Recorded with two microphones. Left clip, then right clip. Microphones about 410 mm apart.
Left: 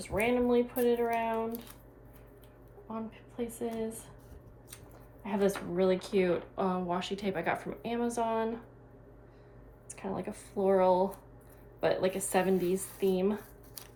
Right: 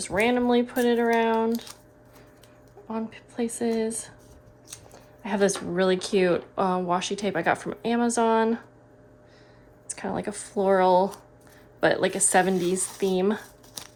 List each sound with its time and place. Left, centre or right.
0.0 s speech: right
2.8 s speech: centre
5.2 s speech: right
9.9 s speech: centre